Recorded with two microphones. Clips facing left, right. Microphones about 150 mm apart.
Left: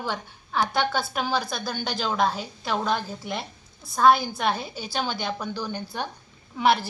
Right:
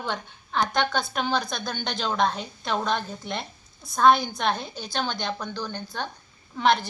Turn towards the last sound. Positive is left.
turn(degrees=5)  # may be behind; listen again after turning